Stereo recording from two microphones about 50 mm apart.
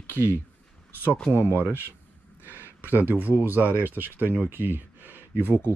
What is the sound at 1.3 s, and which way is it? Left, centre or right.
Speech, right.